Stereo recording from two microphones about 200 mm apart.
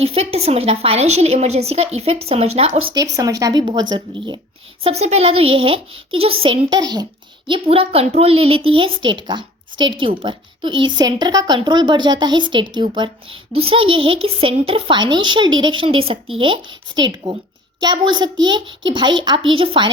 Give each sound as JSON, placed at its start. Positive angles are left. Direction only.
{"t": 0.0, "sound": "a woman's voice", "side_deg": -30}
{"t": 2.9, "sound": "a child's voice", "side_deg": -15}
{"t": 4.8, "sound": "a child's voice", "side_deg": -30}